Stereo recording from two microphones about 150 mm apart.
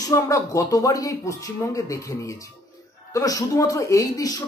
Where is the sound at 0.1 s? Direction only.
20° left (ahead or behind).